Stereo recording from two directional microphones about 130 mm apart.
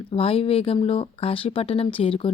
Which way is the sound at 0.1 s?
50° left (ahead or behind).